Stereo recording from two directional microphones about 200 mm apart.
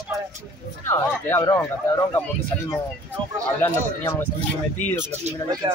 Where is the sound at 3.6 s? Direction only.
10° left (ahead or behind).